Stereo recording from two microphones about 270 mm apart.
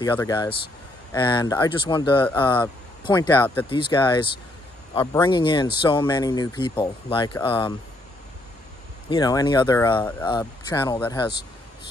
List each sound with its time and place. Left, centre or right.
0.0 s speech: centre
9.1 s speech: centre